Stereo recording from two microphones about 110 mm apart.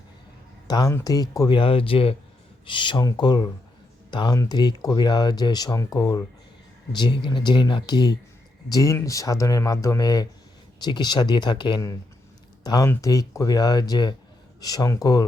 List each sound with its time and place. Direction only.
0.7 s speech: 35° left (ahead or behind)
1.5 s speech: 50° left (ahead or behind)
3.0 s speech: 35° left (ahead or behind)
8.7 s speech: 30° left (ahead or behind); by 11.8 s 45° left (ahead or behind)
12.6 s speech: 35° left (ahead or behind)